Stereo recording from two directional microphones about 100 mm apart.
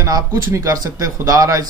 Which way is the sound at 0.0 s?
35° right (ahead or behind).